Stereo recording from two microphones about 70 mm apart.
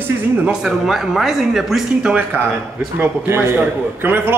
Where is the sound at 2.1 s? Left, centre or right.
Right.